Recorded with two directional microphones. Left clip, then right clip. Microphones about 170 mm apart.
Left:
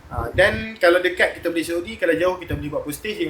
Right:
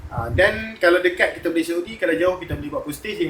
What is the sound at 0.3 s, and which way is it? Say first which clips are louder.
Speech: even; 55° left (ahead or behind).